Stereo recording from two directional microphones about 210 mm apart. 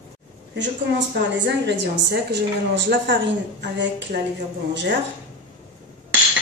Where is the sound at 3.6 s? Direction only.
55° right (ahead or behind).